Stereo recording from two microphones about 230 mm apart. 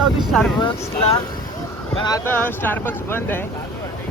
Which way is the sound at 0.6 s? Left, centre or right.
Centre.